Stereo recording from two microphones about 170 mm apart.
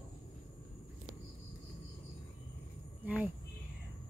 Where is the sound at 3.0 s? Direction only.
10° right (ahead or behind).